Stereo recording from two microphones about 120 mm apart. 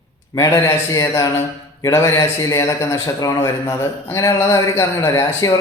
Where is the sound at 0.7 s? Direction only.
30° left (ahead or behind).